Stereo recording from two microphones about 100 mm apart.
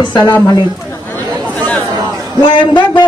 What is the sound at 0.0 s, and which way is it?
Speech, 50° left (ahead or behind).